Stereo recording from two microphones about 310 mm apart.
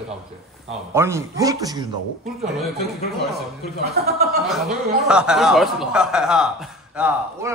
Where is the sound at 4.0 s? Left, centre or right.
Right.